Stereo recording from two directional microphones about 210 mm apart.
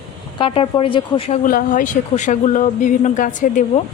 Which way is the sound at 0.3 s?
25° left (ahead or behind).